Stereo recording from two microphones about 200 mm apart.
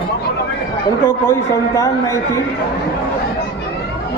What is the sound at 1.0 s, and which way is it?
Speech, 15° left (ahead or behind).